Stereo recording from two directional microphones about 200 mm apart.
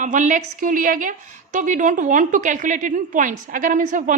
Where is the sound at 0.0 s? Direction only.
40° right (ahead or behind).